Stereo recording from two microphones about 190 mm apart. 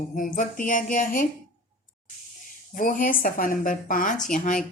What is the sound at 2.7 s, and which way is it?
Speech, 45° left (ahead or behind).